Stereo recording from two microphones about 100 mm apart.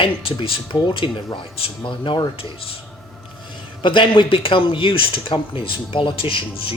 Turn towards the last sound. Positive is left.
turn(degrees=60)  # may be behind; listen again after turning